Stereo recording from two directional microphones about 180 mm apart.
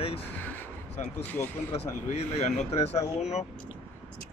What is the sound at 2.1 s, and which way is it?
Speech, 35° left (ahead or behind).